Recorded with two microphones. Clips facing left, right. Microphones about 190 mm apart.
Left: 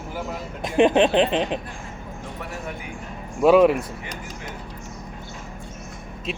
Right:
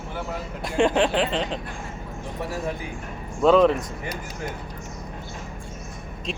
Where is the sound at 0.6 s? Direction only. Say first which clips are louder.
Left 4 dB; 20° left (ahead or behind).